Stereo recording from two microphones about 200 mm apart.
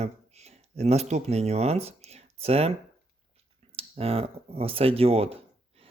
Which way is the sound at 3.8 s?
30° right (ahead or behind).